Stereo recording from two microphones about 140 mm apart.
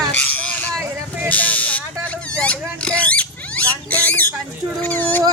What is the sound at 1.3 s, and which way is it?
Buzzer, 10° left (ahead or behind).